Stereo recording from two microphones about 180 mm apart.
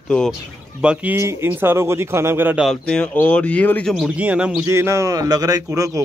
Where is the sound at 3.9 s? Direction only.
5° right (ahead or behind).